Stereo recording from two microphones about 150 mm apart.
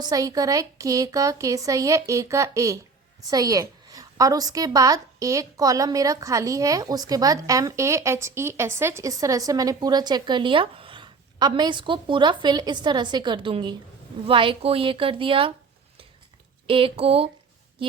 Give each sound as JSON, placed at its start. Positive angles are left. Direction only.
{"t": 0.0, "sound": "a woman's voice", "side_deg": -25}
{"t": 16.6, "sound": "a woman's voice", "side_deg": -35}